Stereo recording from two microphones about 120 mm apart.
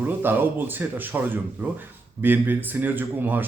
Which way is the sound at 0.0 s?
15° right (ahead or behind).